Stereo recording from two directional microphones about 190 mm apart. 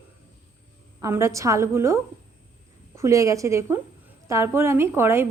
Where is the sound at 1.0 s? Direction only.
15° right (ahead or behind).